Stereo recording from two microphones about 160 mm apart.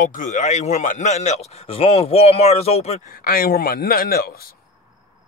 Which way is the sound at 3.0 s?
65° left (ahead or behind).